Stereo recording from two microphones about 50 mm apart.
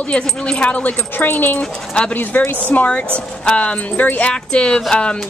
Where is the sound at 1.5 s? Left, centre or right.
Centre.